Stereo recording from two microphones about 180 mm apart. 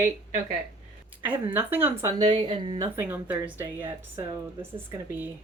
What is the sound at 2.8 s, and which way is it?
Speech, 10° right (ahead or behind).